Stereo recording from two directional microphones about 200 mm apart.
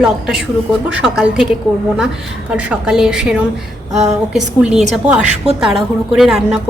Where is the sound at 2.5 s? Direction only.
5° right (ahead or behind).